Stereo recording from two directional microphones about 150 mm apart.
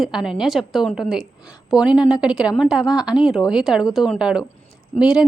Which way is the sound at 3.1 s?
5° right (ahead or behind).